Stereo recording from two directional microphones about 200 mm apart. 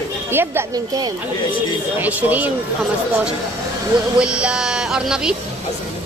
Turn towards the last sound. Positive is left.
turn(degrees=-5)  # may be behind; listen again after turning